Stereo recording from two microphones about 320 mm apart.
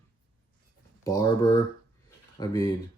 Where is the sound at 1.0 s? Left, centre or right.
Centre.